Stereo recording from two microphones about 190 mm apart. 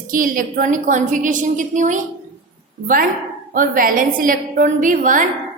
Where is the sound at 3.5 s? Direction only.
45° right (ahead or behind).